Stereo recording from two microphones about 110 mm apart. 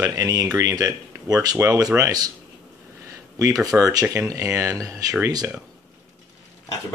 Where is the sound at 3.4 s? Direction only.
30° right (ahead or behind).